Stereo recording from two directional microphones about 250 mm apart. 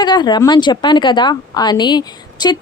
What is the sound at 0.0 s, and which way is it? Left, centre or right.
Speech, centre.